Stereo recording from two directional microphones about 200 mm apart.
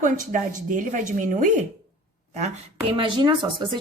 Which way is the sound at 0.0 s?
40° right (ahead or behind).